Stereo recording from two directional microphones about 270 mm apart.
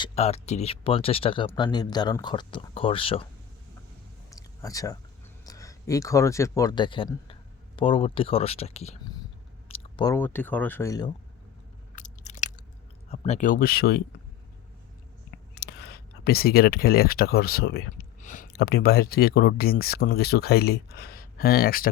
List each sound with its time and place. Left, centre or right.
0.0 s speech: left
4.3 s a sound: centre
5.5 s speech: centre
11.9 s biting: left
13.1 s speech: left
15.5 s speech: left